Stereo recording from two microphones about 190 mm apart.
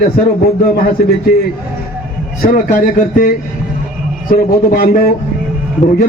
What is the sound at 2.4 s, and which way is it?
A man's voice, 50° left (ahead or behind).